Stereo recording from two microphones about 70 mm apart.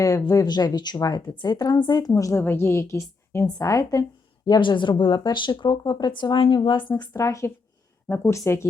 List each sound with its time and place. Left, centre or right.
0.0 s speech: left
0.4 s speech: left
2.4 s a woman's voice: left
3.6 s speech: left
4.4 s speech: left
7.1 s speech: left
8.0 s a woman's voice: left